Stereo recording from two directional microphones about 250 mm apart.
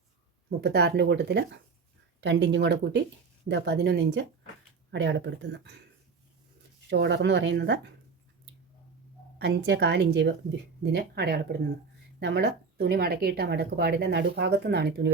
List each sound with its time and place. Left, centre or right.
0.6 s speech: right
6.9 s speech: right
9.4 s speech: right